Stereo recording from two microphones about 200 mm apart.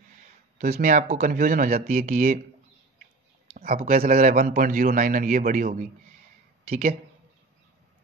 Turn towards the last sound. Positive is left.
turn(degrees=-35)  # may be behind; listen again after turning